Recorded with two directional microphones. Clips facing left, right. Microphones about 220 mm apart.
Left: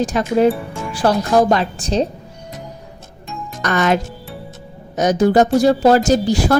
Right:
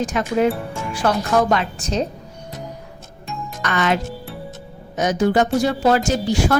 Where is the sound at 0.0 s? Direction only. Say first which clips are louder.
Left 4 dB; 35° left (ahead or behind).